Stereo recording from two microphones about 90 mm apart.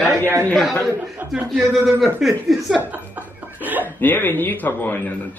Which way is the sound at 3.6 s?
20° right (ahead or behind).